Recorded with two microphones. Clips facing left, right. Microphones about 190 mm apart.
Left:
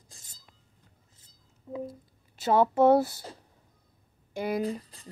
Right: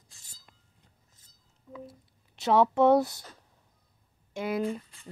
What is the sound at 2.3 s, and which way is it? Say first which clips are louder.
Speech: even; centre (ahead or behind).